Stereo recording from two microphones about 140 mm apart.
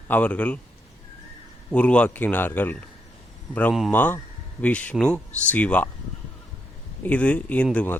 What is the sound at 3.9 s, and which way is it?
A man's voice, 15° left (ahead or behind).